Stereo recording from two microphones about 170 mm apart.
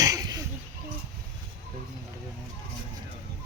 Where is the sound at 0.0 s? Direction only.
20° right (ahead or behind).